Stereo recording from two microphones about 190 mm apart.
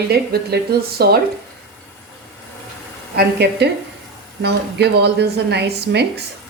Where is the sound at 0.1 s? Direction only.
55° right (ahead or behind).